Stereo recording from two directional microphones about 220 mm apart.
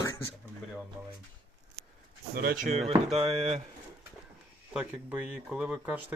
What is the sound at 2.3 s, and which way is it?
Speech, 45° right (ahead or behind).